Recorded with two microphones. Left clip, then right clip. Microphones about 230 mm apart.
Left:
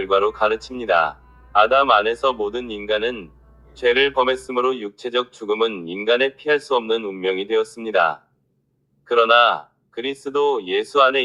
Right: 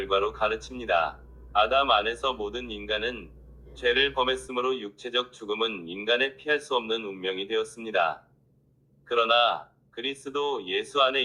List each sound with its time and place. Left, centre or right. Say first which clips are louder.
0.0 s speech: left 8 dB; left